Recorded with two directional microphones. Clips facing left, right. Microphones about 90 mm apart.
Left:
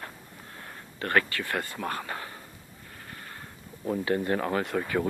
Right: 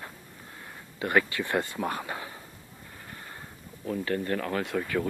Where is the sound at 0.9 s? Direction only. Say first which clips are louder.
Right 1 dB; 10° right (ahead or behind).